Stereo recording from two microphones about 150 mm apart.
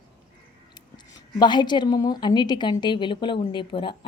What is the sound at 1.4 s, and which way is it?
A woman's voice, 30° left (ahead or behind).